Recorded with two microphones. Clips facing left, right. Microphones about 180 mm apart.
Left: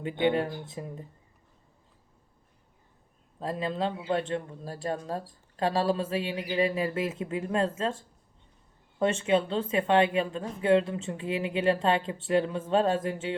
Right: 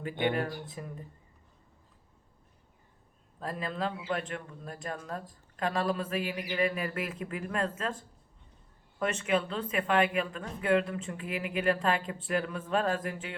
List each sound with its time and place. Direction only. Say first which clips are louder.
0.0 s speech: left 4 dB; 25° left (ahead or behind)
3.4 s speech: left 4 dB; 25° left (ahead or behind)